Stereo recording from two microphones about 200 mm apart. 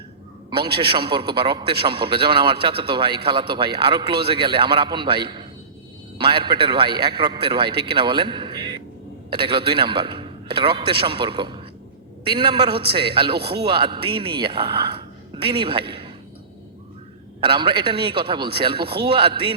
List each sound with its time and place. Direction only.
0.5 s a man's voice: 25° right (ahead or behind)
17.4 s a man's voice: 25° right (ahead or behind)